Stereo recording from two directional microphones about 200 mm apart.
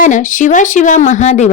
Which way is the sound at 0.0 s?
40° left (ahead or behind).